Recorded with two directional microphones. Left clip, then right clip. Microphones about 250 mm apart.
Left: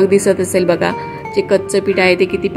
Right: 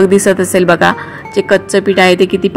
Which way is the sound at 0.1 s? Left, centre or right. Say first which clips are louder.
Right 3 dB; centre.